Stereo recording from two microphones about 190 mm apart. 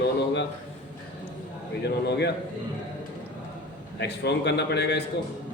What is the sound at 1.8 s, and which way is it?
Speech, 60° left (ahead or behind).